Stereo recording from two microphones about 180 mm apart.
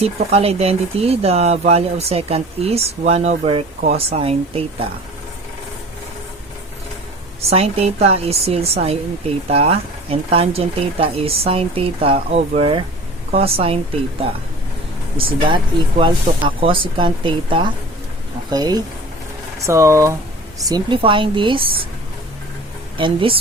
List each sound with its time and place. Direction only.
0.0 s speech: 35° right (ahead or behind)
7.5 s speech: 35° right (ahead or behind)
15.4 s speech: 25° right (ahead or behind)
23.0 s speech: 30° right (ahead or behind)